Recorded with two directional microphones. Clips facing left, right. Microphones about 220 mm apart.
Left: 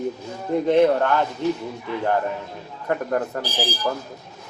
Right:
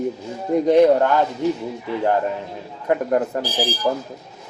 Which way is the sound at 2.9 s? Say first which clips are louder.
Right 4 dB; 20° right (ahead or behind).